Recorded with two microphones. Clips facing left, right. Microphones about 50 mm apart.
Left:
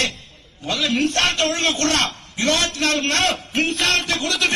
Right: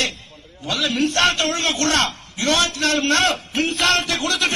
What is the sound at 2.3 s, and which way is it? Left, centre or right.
Speech, left.